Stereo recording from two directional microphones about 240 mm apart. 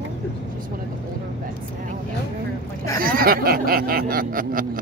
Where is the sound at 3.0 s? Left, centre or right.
Right.